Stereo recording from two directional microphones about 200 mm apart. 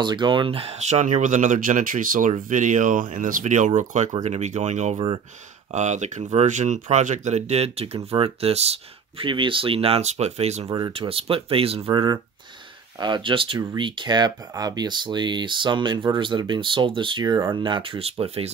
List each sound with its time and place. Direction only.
0.0 s speech: 20° right (ahead or behind)